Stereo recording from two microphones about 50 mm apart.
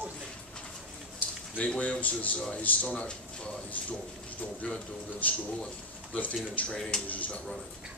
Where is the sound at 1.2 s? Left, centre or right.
Left.